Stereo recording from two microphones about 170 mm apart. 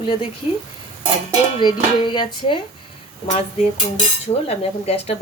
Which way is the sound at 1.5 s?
25° left (ahead or behind).